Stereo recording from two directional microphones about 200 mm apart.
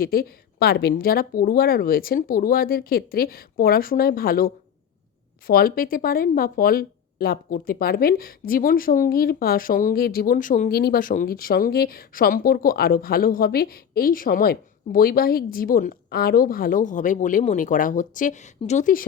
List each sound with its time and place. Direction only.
0.0 s speech: 50° left (ahead or behind)